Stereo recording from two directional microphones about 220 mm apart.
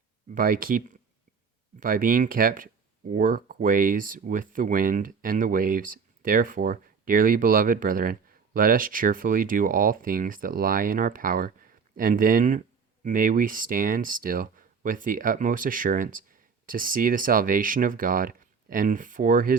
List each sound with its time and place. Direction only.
0.3 s speech: 40° right (ahead or behind)